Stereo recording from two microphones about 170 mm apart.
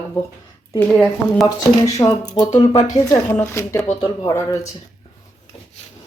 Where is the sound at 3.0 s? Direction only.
15° left (ahead or behind).